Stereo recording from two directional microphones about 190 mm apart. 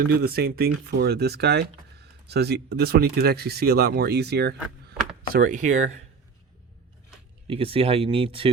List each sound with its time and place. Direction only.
0.1 s speech: 55° right (ahead or behind)
5.3 s speech: 45° right (ahead or behind)
7.4 s speech: 30° right (ahead or behind)